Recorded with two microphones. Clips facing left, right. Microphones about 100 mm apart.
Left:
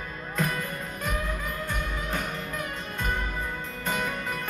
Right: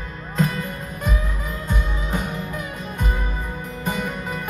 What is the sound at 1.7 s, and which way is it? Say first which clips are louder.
Music: right 7 dB; 15° right (ahead or behind).